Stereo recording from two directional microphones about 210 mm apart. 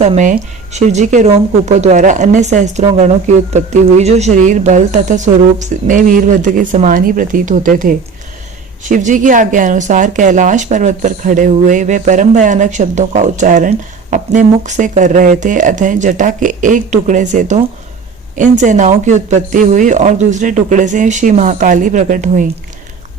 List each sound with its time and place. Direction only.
0.0 s speech: 35° right (ahead or behind)